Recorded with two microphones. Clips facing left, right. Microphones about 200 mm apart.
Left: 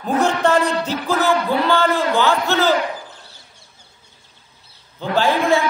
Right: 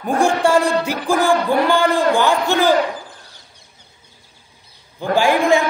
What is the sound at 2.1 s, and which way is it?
Speech, 15° right (ahead or behind).